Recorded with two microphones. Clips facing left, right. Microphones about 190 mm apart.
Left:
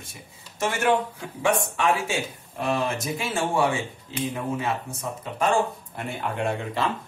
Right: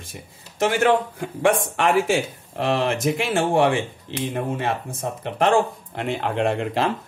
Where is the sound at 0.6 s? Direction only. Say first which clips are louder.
Right 6 dB; 90° right.